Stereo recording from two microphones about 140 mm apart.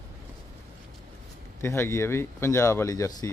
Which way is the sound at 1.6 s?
15° left (ahead or behind).